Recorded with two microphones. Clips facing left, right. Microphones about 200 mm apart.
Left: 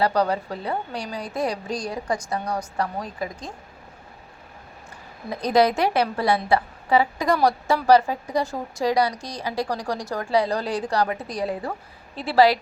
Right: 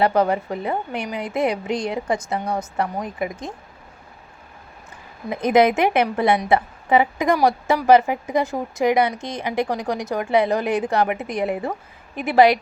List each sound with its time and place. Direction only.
0.0 s a woman's voice: 20° right (ahead or behind)
5.3 s a woman's voice: 20° right (ahead or behind)